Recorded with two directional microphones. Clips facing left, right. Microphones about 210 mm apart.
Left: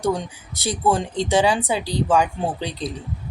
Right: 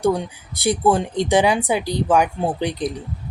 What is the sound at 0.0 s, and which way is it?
Speech, 10° right (ahead or behind).